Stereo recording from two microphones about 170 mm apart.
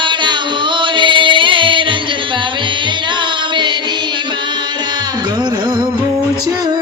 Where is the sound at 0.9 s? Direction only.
30° right (ahead or behind).